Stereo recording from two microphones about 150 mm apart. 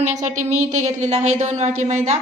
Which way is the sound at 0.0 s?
50° right (ahead or behind).